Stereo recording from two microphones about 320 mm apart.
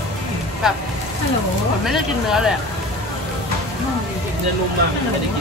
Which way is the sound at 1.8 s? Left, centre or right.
Centre.